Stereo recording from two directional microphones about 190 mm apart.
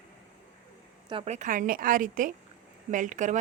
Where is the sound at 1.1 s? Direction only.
30° right (ahead or behind).